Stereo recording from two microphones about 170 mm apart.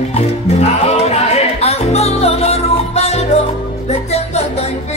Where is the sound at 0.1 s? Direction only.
40° left (ahead or behind).